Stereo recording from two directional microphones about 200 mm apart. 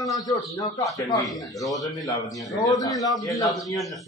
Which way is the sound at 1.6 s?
Centre (ahead or behind).